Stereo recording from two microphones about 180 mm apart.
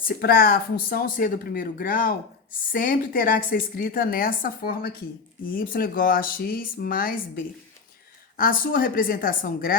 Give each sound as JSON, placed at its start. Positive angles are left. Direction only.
{"t": 0.0, "sound": "a woman's voice", "side_deg": 55}